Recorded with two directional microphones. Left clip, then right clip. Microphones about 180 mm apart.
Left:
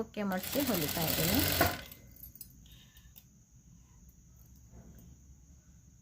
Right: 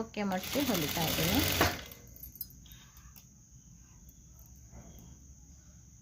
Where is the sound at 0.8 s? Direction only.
30° left (ahead or behind).